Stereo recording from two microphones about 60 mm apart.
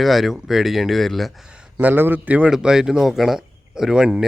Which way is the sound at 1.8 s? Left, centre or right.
Right.